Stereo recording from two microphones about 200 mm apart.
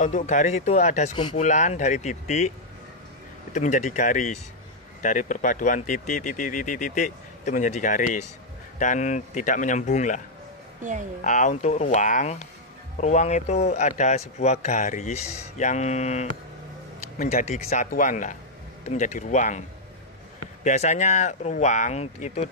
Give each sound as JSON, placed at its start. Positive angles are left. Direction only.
{"t": 0.0, "sound": "speech", "side_deg": 40}
{"t": 3.5, "sound": "speech", "side_deg": 35}
{"t": 10.8, "sound": "a woman's voice", "side_deg": -40}
{"t": 11.2, "sound": "speech", "side_deg": 40}
{"t": 20.6, "sound": "speech", "side_deg": 35}